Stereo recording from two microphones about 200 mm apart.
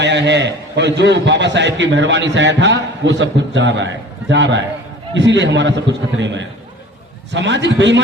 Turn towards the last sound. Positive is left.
turn(degrees=-60)  # may be behind; listen again after turning